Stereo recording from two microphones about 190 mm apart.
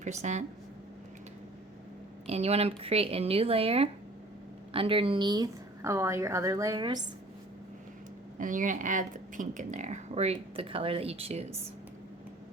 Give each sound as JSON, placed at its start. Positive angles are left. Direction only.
{"t": 0.0, "sound": "speech", "side_deg": -40}
{"t": 2.2, "sound": "a woman's voice", "side_deg": -35}
{"t": 8.4, "sound": "speech", "side_deg": -45}